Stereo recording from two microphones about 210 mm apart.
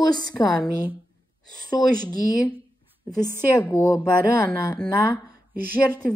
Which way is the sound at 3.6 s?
15° left (ahead or behind).